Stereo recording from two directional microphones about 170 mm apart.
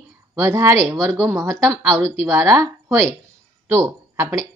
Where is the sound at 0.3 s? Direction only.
15° right (ahead or behind).